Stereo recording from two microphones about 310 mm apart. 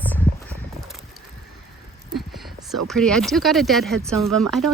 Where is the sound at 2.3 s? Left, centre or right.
Centre.